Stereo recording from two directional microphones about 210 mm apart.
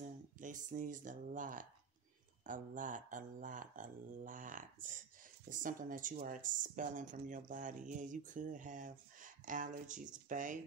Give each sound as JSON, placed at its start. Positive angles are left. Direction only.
{"t": 0.4, "sound": "speech", "side_deg": -40}